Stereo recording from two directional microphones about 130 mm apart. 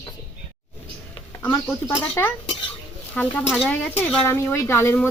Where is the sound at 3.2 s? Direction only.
10° left (ahead or behind).